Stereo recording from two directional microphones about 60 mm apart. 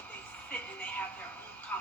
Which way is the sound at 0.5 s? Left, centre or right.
Left.